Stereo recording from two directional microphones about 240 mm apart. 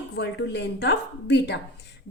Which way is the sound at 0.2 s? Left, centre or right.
Left.